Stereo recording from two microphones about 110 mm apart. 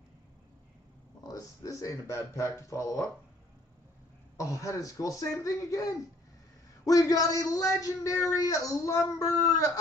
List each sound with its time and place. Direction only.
1.2 s speech: 35° left (ahead or behind)
4.4 s a man's voice: 30° left (ahead or behind)